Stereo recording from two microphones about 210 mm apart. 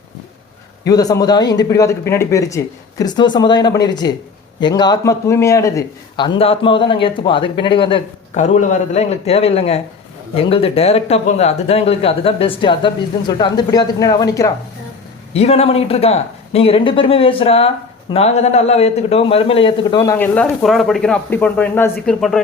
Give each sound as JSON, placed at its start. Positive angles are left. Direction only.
{"t": 0.9, "sound": "a man's voice", "side_deg": 15}
{"t": 8.4, "sound": "a man's voice", "side_deg": 35}
{"t": 15.3, "sound": "a man's voice", "side_deg": 30}